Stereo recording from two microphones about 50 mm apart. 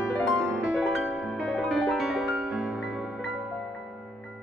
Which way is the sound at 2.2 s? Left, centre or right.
Centre.